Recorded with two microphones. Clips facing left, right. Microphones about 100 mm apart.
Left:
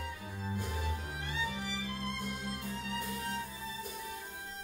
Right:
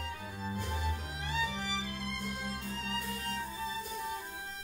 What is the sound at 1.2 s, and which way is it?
Music, 85° right.